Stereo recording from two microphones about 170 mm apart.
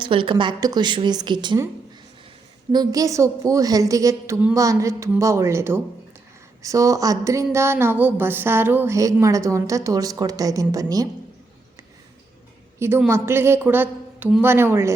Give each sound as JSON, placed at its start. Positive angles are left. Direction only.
{"t": 0.0, "sound": "a woman's voice", "side_deg": -30}
{"t": 2.7, "sound": "a woman's voice", "side_deg": -20}
{"t": 13.1, "sound": "a woman's voice", "side_deg": -15}